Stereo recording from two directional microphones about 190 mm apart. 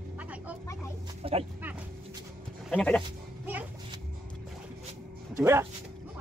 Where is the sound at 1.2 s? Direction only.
30° right (ahead or behind).